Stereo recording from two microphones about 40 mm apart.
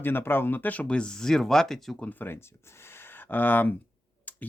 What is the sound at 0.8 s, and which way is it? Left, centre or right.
Speech, left.